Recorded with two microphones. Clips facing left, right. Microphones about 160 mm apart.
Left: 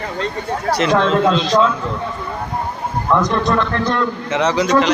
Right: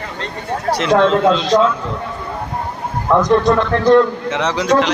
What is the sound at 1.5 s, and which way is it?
Speech, 30° right (ahead or behind).